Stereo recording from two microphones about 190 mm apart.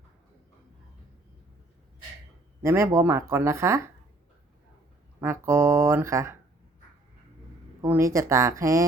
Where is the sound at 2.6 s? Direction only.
15° right (ahead or behind).